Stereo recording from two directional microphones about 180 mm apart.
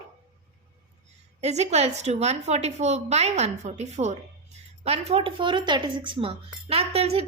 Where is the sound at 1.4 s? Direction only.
35° right (ahead or behind).